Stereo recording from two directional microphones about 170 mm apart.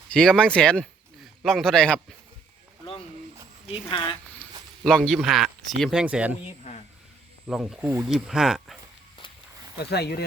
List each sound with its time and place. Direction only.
0.1 s speech: 5° left (ahead or behind)
3.7 s speech: 30° left (ahead or behind)
4.8 s speech: 5° left (ahead or behind)
7.4 s speech: 5° right (ahead or behind)
9.7 s speech: 70° left (ahead or behind)